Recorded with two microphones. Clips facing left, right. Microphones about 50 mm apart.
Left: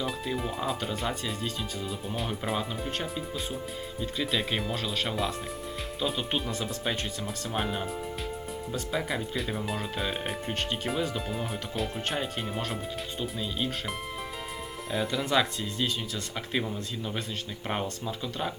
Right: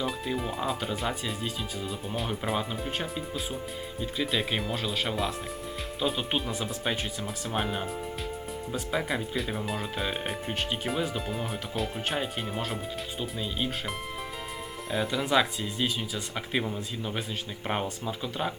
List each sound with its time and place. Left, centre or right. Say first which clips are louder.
0.0 s speech: right 1 dB; centre
14.9 s speech: right 1 dB; centre